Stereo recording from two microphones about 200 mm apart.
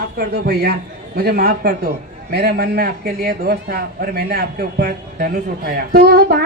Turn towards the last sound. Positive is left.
turn(degrees=-50)  # may be behind; listen again after turning